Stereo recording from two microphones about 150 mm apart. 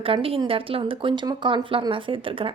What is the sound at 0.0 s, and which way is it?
Speech, 35° right (ahead or behind).